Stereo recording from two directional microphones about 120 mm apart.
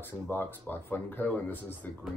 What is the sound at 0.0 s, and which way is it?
Speech, 15° left (ahead or behind).